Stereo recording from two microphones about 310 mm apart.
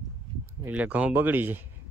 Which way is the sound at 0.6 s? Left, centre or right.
Centre.